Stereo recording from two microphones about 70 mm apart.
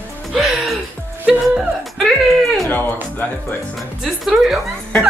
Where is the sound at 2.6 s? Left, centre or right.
Left.